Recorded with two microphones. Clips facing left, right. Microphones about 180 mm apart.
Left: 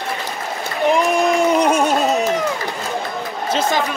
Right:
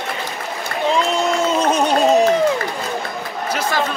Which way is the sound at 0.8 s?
15° left (ahead or behind).